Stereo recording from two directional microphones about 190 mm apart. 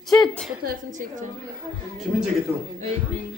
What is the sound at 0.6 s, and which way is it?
Speech, 40° right (ahead or behind).